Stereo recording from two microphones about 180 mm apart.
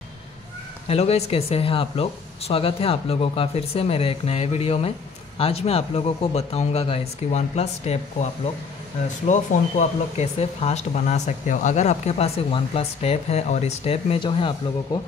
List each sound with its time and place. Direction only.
0.8 s speech: 35° left (ahead or behind)
9.3 s speech: 40° left (ahead or behind)